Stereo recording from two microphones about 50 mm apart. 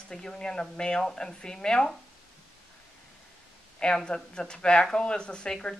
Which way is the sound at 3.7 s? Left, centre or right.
Centre.